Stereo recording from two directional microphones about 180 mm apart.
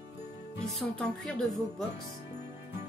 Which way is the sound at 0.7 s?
5° left (ahead or behind).